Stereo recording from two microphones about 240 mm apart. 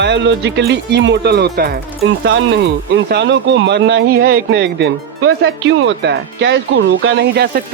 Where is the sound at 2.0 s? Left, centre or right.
Right.